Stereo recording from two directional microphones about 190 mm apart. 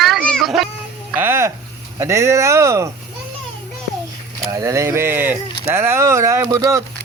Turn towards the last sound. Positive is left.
turn(degrees=-15)  # may be behind; listen again after turning